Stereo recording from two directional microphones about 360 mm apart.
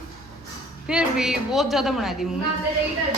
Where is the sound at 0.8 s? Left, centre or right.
Centre.